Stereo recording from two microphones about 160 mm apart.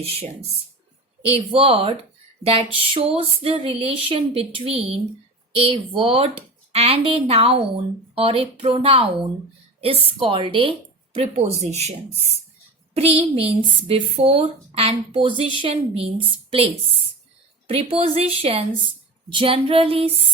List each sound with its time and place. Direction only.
0.0 s speech: 40° right (ahead or behind)
1.5 s speech: 35° right (ahead or behind)